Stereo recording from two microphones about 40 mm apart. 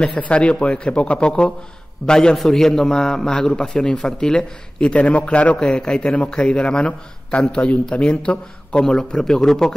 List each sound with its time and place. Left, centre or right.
0.2 s a man's voice: left
5.0 s a man's voice: left
5.6 s a man's voice: centre